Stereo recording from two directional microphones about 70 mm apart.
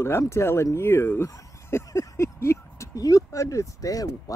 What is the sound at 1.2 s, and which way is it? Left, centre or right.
Speech, left.